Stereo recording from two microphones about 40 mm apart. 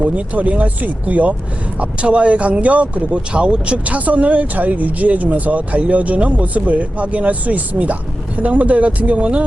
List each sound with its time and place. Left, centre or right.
0.0 s speech: right
1.8 s speech: right
3.8 s speech: right